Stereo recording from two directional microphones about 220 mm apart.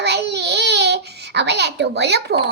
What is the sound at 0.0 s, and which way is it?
Babbling, 50° right (ahead or behind).